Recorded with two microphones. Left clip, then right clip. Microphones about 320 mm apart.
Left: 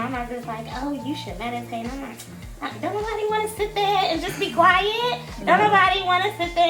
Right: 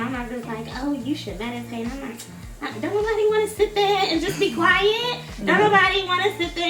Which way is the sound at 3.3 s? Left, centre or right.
Centre.